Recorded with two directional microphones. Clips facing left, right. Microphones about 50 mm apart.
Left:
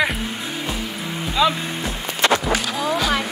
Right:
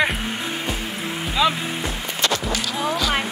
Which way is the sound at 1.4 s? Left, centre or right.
Centre.